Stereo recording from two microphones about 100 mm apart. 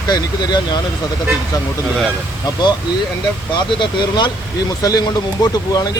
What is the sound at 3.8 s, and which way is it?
Speech, 50° left (ahead or behind).